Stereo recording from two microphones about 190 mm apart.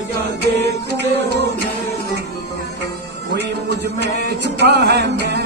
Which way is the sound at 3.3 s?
65° right (ahead or behind).